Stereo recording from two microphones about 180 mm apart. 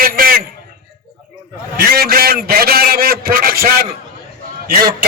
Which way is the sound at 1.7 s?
55° right (ahead or behind).